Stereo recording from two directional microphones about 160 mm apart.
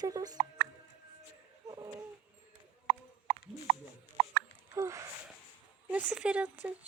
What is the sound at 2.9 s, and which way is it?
Horse, 5° right (ahead or behind).